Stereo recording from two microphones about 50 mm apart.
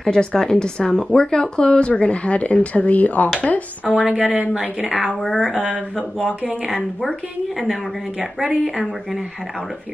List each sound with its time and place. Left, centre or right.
0.0 s speech: centre; by 3.6 s left
3.8 s speech: right
8.2 s speech: centre